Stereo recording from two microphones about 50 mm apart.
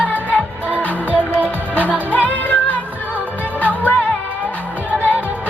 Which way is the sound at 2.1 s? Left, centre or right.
Left.